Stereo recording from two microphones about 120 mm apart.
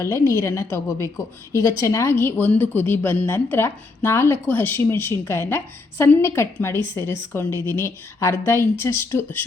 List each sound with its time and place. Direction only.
0.0 s a woman's voice: 25° left (ahead or behind)